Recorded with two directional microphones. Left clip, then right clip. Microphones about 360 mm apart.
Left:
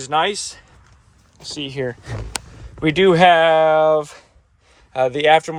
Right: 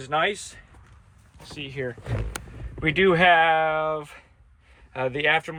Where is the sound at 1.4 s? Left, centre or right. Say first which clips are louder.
Left 7 dB; left.